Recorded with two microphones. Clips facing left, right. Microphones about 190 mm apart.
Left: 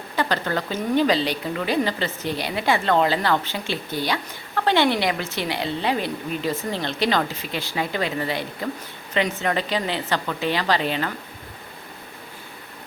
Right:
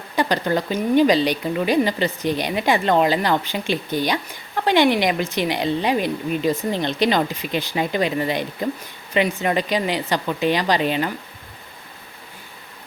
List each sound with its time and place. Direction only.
0.2 s a woman's voice: 15° right (ahead or behind)